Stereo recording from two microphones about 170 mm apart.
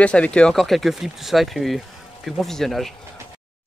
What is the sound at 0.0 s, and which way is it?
Speech, 5° left (ahead or behind).